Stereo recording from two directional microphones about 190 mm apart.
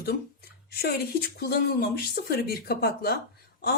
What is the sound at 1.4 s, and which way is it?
Speech, 55° left (ahead or behind).